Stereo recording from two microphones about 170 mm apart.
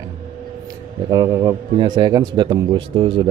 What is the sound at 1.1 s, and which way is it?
A man's voice, 25° right (ahead or behind).